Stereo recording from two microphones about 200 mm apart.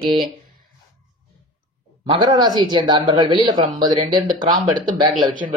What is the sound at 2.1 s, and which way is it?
Speech, 25° right (ahead or behind).